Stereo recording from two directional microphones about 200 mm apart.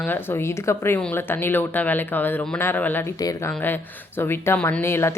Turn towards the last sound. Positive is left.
turn(degrees=10)  # may be behind; listen again after turning